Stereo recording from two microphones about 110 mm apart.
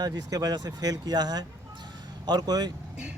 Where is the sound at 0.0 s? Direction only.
35° right (ahead or behind).